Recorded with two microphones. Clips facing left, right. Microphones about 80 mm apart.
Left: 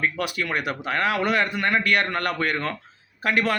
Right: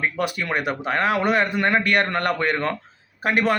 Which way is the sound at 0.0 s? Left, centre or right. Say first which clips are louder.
Right 1 dB; right.